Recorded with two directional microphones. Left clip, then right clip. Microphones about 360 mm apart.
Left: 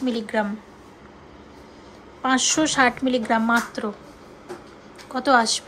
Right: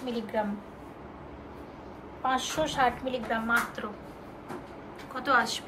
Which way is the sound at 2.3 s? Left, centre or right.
Left.